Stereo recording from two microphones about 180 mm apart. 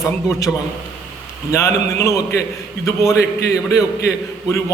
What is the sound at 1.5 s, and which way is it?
A man's voice, 15° left (ahead or behind).